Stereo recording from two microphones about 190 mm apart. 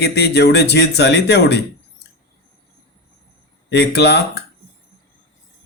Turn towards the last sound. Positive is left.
turn(degrees=60)  # may be behind; listen again after turning